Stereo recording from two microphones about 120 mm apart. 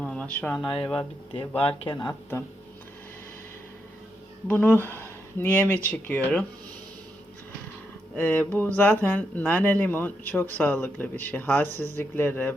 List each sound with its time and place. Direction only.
0.0 s a sound: 10° left (ahead or behind)
0.5 s speech: 5° left (ahead or behind)
1.8 s speech: 40° left (ahead or behind)
4.4 s speech: 15° left (ahead or behind)
8.1 s speech: 15° left (ahead or behind)